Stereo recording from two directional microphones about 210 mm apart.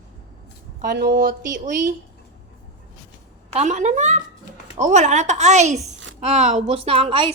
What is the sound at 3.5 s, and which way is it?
A woman's voice, 35° right (ahead or behind).